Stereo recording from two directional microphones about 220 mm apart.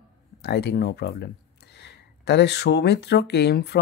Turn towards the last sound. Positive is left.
turn(degrees=50)  # may be behind; listen again after turning